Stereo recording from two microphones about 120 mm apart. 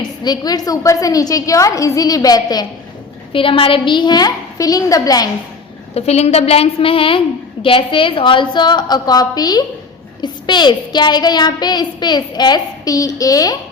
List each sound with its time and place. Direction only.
0.0 s a woman's voice: 35° left (ahead or behind)
3.3 s a woman's voice: 45° left (ahead or behind); by 5.3 s 30° left (ahead or behind)
5.9 s a woman's voice: 60° left (ahead or behind); by 13.6 s 30° left (ahead or behind)